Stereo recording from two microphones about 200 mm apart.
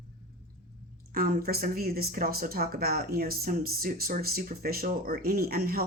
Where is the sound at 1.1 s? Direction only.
45° right (ahead or behind).